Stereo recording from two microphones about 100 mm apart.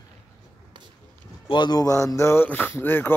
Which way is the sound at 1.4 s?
50° left (ahead or behind).